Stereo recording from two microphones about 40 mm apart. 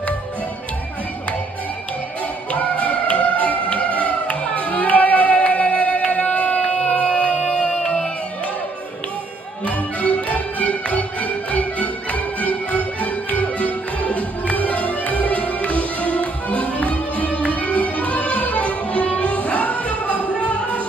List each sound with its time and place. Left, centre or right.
2.5 s music: left
9.7 s music: left